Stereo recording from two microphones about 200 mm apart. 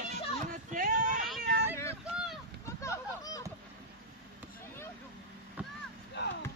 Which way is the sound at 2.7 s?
15° left (ahead or behind).